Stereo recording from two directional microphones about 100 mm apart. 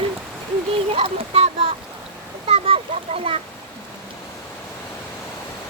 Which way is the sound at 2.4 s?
70° right (ahead or behind).